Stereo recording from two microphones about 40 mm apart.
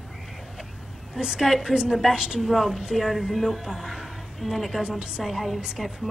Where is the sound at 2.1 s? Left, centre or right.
Centre.